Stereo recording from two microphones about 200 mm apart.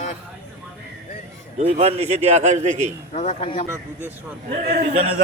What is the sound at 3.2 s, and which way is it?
Speech, 30° left (ahead or behind).